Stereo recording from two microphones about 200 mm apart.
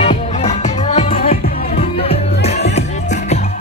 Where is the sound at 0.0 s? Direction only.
30° left (ahead or behind).